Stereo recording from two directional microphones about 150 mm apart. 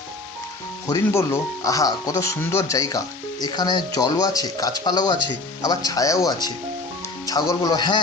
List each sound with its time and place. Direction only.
0.9 s speech: 20° left (ahead or behind)